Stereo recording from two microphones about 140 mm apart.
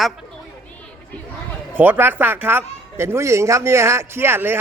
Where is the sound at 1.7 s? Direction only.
15° right (ahead or behind).